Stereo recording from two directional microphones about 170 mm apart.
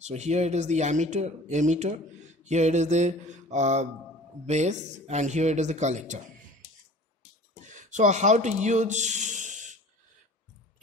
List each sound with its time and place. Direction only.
0.0 s speech: 40° right (ahead or behind)
7.6 s speech: 45° right (ahead or behind)